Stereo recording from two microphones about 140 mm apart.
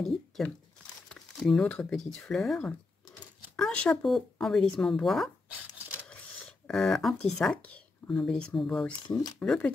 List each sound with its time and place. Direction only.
0.0 s a sound: centre (ahead or behind)
1.0 s speech: 5° left (ahead or behind)
9.0 s speech: 25° left (ahead or behind)
9.4 s speech: 10° left (ahead or behind)